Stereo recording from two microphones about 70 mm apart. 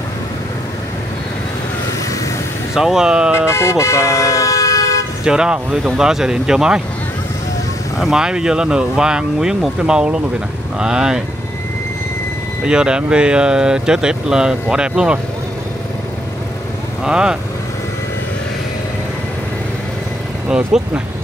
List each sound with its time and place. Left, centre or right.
2.7 s speech: centre
3.5 s speech: left
5.2 s speech: centre
8.0 s speech: centre
12.6 s speech: centre
17.0 s speech: centre
20.4 s speech: centre